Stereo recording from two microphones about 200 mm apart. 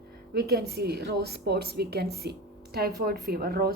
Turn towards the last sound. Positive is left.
turn(degrees=-50)  # may be behind; listen again after turning